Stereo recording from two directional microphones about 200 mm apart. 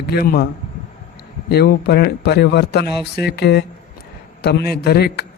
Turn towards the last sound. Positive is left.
turn(degrees=55)  # may be behind; listen again after turning